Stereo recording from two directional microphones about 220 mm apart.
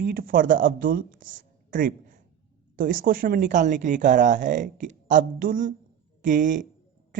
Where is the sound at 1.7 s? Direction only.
40° right (ahead or behind).